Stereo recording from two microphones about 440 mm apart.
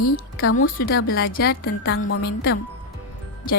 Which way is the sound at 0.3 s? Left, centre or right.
Left.